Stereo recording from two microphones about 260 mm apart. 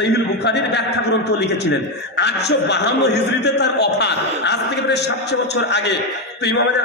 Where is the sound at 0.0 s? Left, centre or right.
Left.